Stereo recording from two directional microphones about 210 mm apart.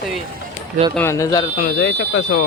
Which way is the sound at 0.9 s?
15° left (ahead or behind).